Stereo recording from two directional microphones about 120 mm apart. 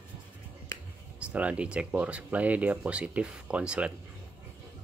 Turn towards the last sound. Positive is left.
turn(degrees=-10)  # may be behind; listen again after turning